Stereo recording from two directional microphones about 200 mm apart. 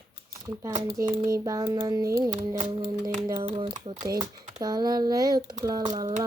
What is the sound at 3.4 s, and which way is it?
Speech, 35° right (ahead or behind).